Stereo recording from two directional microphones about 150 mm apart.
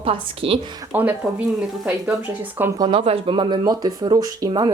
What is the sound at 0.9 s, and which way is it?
Speech, 10° right (ahead or behind).